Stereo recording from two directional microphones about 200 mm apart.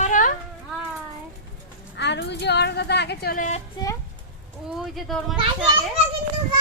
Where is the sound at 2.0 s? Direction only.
60° left (ahead or behind); by 3.6 s 40° left (ahead or behind).